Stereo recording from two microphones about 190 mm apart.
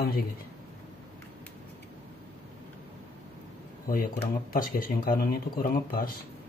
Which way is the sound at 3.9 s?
50° left (ahead or behind).